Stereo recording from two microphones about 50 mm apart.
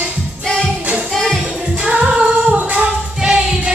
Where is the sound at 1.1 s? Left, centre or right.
Centre.